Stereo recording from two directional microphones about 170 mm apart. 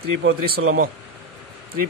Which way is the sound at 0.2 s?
90° right.